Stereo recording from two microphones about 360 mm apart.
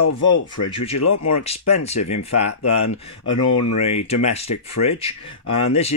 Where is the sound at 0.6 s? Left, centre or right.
Centre.